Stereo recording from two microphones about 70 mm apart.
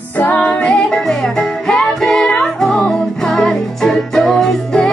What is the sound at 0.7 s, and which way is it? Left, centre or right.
Music, centre.